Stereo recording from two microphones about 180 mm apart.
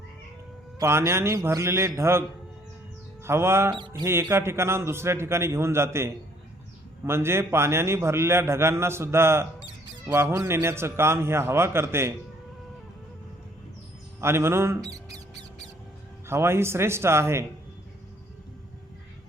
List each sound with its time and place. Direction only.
0.8 s a man's voice: 15° right (ahead or behind)
3.2 s a man's voice: 15° right (ahead or behind)
3.8 s music: 25° right (ahead or behind)
4.0 s a man's voice: 15° right (ahead or behind)
14.2 s a man's voice: 15° right (ahead or behind)
14.8 s squawk: 20° right (ahead or behind)
16.2 s a man's voice: 15° right (ahead or behind)